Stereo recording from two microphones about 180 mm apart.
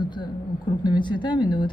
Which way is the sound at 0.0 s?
25° left (ahead or behind).